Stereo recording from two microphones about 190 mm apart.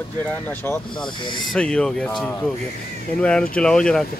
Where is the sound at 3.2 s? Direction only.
5° left (ahead or behind).